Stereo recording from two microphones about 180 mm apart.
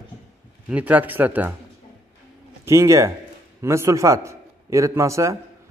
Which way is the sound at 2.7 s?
15° right (ahead or behind).